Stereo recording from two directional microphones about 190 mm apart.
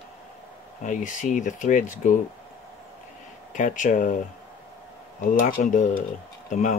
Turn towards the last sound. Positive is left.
turn(degrees=40)  # may be behind; listen again after turning